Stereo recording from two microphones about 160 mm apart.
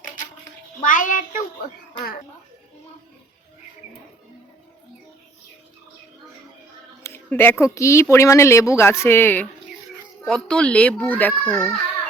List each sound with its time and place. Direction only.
0.8 s a child's voice: 55° left (ahead or behind)
7.0 s speech: 15° left (ahead or behind)